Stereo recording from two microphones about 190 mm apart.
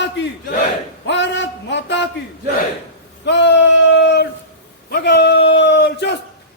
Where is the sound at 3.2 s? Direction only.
65° left (ahead or behind).